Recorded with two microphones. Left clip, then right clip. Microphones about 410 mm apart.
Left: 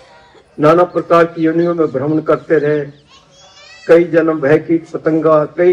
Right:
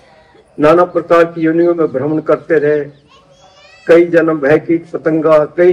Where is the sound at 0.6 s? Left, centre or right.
Right.